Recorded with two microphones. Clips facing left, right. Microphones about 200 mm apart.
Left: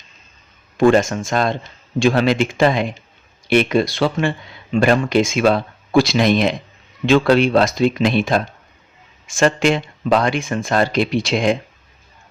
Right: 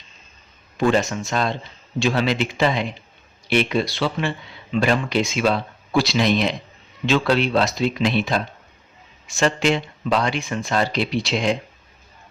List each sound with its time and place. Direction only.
0.8 s speech: 50° left (ahead or behind)